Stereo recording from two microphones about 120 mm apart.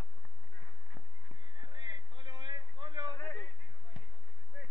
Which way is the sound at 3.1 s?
15° left (ahead or behind).